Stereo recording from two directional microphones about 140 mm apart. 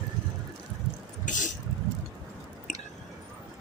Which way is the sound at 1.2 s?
65° left (ahead or behind).